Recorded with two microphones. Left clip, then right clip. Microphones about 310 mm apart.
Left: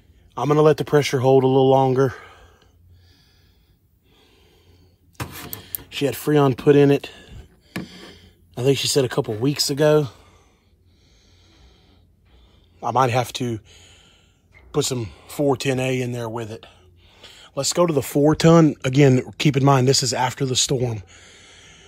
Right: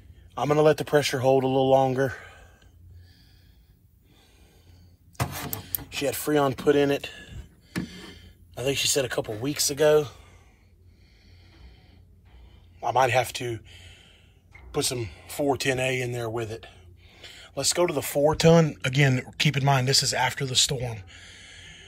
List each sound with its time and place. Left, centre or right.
0.3 s speech: left
5.6 s a sound: left
11.4 s music: left
12.8 s speech: centre
13.4 s a sound: centre
14.7 s speech: centre